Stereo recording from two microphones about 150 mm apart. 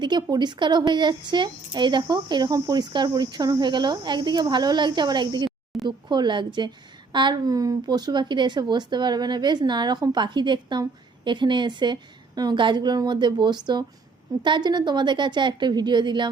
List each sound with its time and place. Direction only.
0.0 s a woman's voice: 30° right (ahead or behind)
5.5 s a sound: centre (ahead or behind)
6.1 s a woman's voice: 30° right (ahead or behind)